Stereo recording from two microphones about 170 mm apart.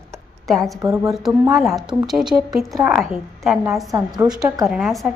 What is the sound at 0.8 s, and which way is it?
Speech, 20° right (ahead or behind).